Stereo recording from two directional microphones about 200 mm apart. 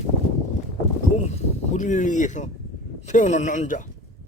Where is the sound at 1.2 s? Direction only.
35° left (ahead or behind).